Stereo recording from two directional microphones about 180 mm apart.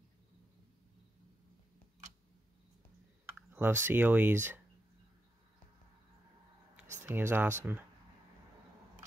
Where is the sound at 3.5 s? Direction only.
10° right (ahead or behind).